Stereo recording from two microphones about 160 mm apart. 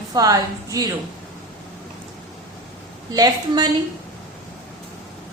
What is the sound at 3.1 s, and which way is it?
Speech, 25° right (ahead or behind).